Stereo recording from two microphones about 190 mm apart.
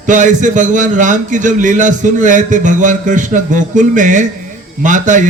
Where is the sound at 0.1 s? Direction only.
40° right (ahead or behind).